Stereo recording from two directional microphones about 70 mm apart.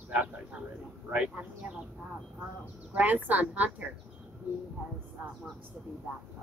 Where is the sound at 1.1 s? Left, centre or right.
Centre.